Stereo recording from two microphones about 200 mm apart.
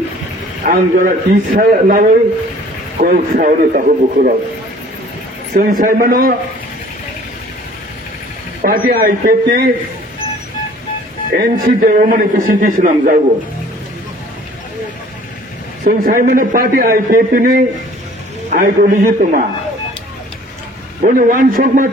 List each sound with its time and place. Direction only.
0.7 s a man's voice: 40° right (ahead or behind)
5.5 s a man's voice: 45° right (ahead or behind)
8.6 s a man's voice: 45° right (ahead or behind)
11.3 s a man's voice: 45° right (ahead or behind)
15.8 s a man's voice: 40° right (ahead or behind)
21.0 s a man's voice: 40° right (ahead or behind)